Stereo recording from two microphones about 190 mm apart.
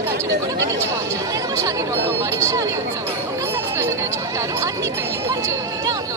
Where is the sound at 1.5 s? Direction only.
15° right (ahead or behind).